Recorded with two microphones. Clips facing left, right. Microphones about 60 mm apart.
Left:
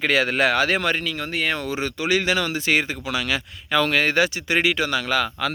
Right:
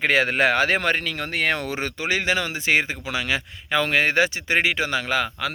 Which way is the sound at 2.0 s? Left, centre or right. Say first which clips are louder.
Left 2 dB; right.